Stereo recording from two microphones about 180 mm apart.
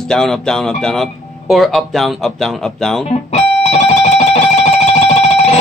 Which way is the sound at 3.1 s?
35° left (ahead or behind).